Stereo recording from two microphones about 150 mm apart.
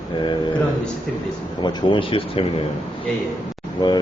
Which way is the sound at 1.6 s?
35° left (ahead or behind).